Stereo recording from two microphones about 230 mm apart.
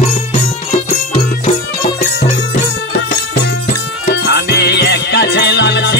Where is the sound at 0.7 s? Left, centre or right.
Left.